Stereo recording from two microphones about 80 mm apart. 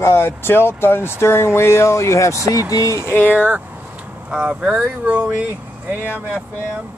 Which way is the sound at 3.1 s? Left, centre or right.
Left.